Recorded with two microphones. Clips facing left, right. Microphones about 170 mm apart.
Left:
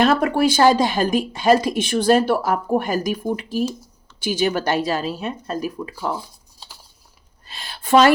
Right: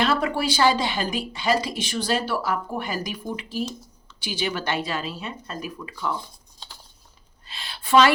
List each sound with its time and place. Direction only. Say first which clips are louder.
0.0 s speech: left 6 dB; 50° left (ahead or behind)
6.1 s computer keyboard: left 2 dB; 5° left (ahead or behind)
7.4 s a sound: left 3 dB; 45° left (ahead or behind)